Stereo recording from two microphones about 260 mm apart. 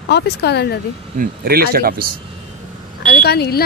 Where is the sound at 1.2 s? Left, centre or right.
Right.